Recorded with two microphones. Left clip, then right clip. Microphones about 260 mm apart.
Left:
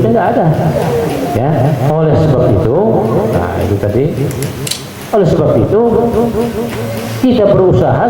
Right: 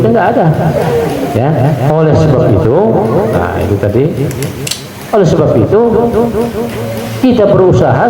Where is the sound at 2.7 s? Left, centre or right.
Right.